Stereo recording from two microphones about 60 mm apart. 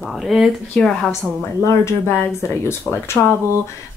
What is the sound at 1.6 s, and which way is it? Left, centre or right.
Speech, left.